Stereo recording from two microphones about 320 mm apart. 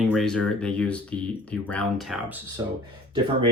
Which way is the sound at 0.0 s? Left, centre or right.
Centre.